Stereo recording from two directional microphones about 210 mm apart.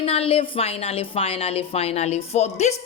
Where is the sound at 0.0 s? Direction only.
30° left (ahead or behind).